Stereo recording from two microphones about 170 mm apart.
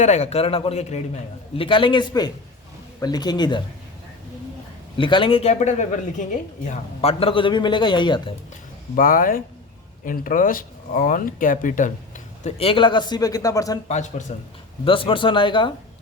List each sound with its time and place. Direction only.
0.0 s a man's voice: 45° left (ahead or behind); by 3.6 s 25° left (ahead or behind)
4.9 s speech: 30° left (ahead or behind); by 6.7 s 50° left (ahead or behind)
7.0 s a man's voice: 35° left (ahead or behind)
9.0 s speech: 55° left (ahead or behind)
12.4 s a man's voice: 40° left (ahead or behind); by 13.7 s 20° left (ahead or behind)
13.8 s speech: 45° left (ahead or behind)
14.8 s a man's voice: 30° left (ahead or behind)